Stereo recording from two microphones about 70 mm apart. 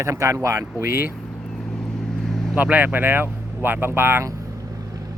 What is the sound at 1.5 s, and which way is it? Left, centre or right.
Vehicle, centre.